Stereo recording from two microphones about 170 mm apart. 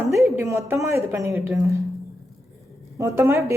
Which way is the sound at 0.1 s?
15° right (ahead or behind).